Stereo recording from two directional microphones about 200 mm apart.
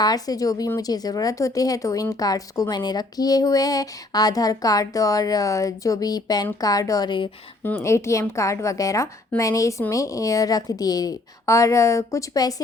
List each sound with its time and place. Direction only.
0.0 s a woman's voice: 20° left (ahead or behind)